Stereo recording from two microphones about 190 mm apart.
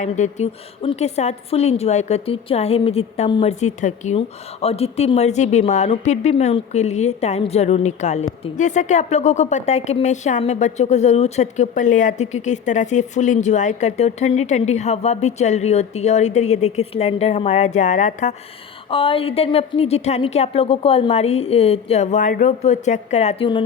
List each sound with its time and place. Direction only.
0.0 s a woman's voice: 35° left (ahead or behind)
18.9 s a woman's voice: 30° left (ahead or behind)